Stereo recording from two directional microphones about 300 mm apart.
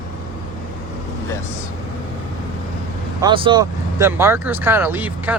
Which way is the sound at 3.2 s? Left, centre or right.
Centre.